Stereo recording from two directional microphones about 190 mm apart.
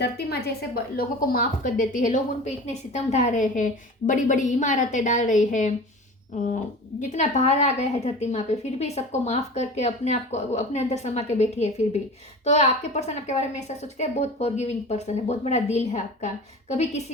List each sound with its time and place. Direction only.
0.0 s a woman's voice: 60° left (ahead or behind); by 5.7 s 40° left (ahead or behind)
7.1 s a woman's voice: 35° left (ahead or behind)